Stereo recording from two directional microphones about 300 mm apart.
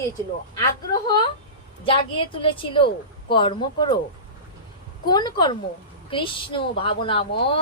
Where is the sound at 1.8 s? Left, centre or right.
Centre.